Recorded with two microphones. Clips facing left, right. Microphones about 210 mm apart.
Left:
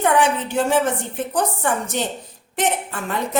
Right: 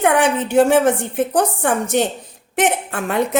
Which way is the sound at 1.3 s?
50° right (ahead or behind).